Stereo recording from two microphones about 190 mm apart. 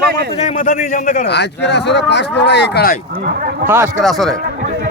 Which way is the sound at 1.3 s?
65° left (ahead or behind).